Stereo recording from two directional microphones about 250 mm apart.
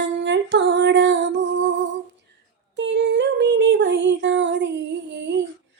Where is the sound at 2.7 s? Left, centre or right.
Right.